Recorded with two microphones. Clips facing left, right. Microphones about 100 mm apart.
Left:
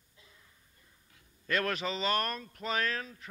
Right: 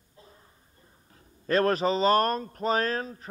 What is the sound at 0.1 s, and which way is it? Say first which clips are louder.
A man's voice: right 8 dB; 40° right (ahead or behind).